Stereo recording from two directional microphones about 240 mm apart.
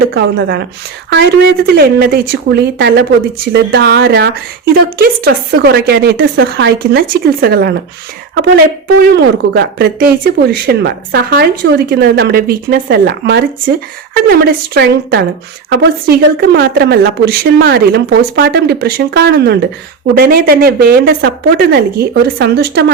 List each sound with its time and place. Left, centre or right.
0.1 s speech: right
9.1 s speech: right